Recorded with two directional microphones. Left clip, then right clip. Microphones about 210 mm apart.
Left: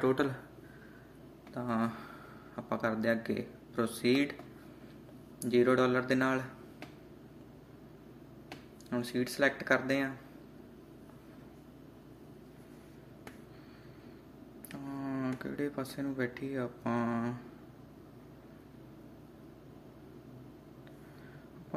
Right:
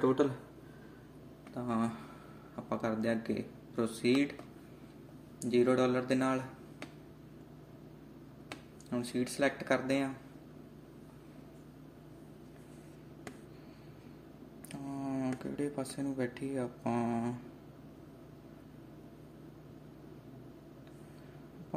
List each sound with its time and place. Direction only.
0.0 s speech: 5° left (ahead or behind)
1.5 s speech: centre (ahead or behind)
5.4 s speech: centre (ahead or behind)
8.9 s speech: centre (ahead or behind)
14.7 s speech: centre (ahead or behind)